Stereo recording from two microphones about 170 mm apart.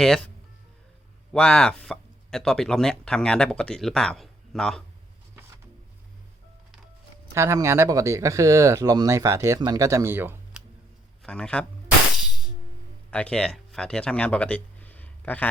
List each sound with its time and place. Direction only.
1.3 s speech: 5° left (ahead or behind)
7.3 s speech: 15° right (ahead or behind)
11.2 s a man's voice: 5° left (ahead or behind)
12.1 s music: 5° right (ahead or behind)
13.1 s speech: 5° left (ahead or behind)